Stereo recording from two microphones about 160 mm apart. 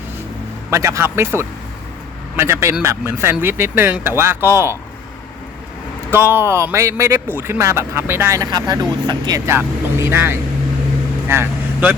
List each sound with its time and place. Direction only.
0.7 s speech: 20° right (ahead or behind)
6.1 s speech: 15° right (ahead or behind)
9.5 s speech: 15° right (ahead or behind)